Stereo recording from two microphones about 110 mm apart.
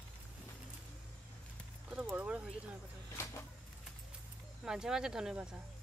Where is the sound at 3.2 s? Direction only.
25° left (ahead or behind).